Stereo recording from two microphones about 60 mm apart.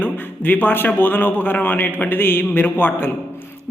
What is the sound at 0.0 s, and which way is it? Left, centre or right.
A man's voice, left.